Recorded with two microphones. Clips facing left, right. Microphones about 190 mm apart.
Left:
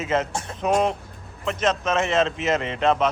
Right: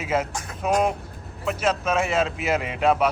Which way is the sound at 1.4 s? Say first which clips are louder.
Left 1 dB; 5° right (ahead or behind).